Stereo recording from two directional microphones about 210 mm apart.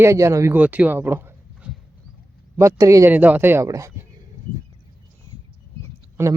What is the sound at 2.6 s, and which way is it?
A man's voice, 15° right (ahead or behind).